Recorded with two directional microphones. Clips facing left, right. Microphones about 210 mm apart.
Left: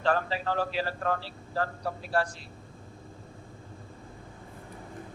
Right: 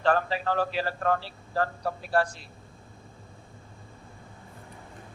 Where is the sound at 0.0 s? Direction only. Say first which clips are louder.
Right 2 dB; 55° right (ahead or behind).